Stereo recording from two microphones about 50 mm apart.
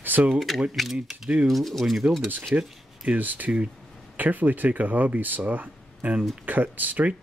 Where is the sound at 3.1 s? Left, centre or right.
Right.